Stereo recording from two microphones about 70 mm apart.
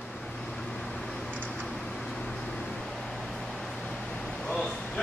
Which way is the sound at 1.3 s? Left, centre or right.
Centre.